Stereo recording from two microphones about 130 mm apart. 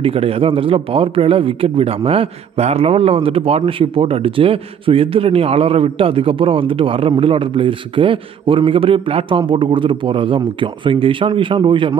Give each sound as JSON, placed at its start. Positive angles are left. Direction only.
{"t": 0.0, "sound": "a man's voice", "side_deg": -45}